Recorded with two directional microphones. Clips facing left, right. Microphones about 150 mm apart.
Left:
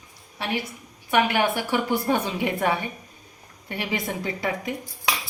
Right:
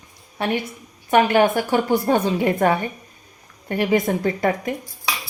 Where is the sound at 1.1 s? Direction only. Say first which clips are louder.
Right 6 dB; 45° right (ahead or behind).